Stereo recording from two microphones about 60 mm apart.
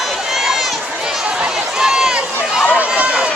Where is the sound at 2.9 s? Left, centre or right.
Centre.